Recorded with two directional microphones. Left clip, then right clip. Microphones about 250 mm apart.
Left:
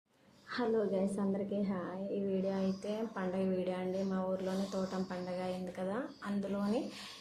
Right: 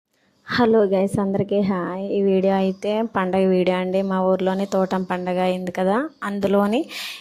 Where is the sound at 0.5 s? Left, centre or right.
Right.